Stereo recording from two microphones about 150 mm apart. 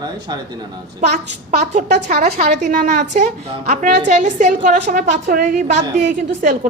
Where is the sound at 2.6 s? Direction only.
55° right (ahead or behind).